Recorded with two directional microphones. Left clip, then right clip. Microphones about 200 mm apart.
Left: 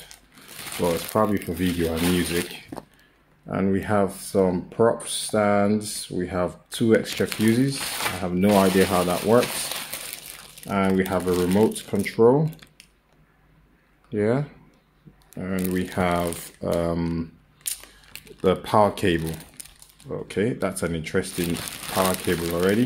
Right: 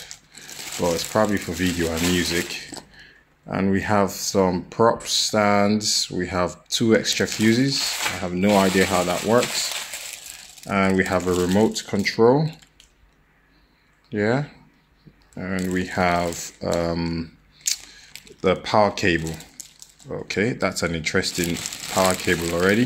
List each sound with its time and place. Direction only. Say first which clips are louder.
0.7 s speech: right 1 dB; centre (ahead or behind)
10.7 s speech: right 3 dB; 5° right (ahead or behind)
14.1 s speech: right 1 dB; centre (ahead or behind)